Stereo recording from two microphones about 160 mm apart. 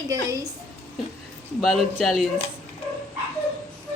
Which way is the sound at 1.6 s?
Centre (ahead or behind).